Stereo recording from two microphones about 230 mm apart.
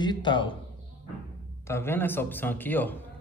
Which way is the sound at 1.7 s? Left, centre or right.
Centre.